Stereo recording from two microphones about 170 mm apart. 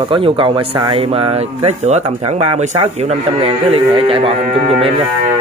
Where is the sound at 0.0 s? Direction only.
30° right (ahead or behind).